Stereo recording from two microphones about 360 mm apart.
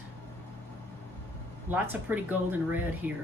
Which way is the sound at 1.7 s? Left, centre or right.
Centre.